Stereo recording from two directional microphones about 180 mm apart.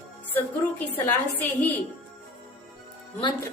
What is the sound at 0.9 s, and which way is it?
Speech, 10° left (ahead or behind).